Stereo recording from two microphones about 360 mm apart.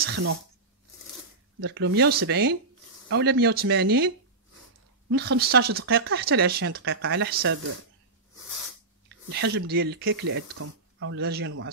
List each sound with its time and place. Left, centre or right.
0.0 s speech: right
1.6 s speech: right
5.1 s speech: right
9.3 s speech: right